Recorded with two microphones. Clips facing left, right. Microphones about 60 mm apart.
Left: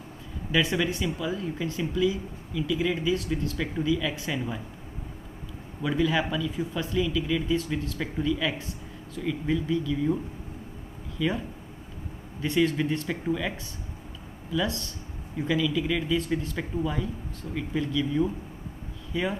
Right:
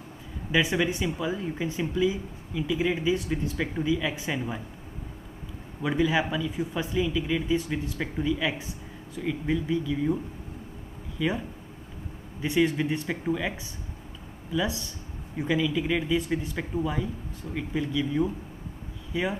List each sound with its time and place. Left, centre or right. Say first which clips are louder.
0.5 s speech: right 1 dB; centre
5.8 s speech: right 1 dB; centre
11.1 s speech: even; centre